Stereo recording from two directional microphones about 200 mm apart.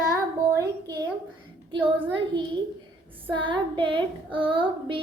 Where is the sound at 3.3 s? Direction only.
25° right (ahead or behind).